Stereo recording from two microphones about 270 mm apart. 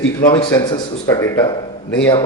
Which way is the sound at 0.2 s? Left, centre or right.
Centre.